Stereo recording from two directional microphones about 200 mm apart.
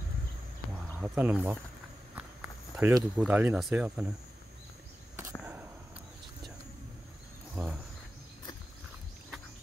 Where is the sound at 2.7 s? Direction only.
10° right (ahead or behind).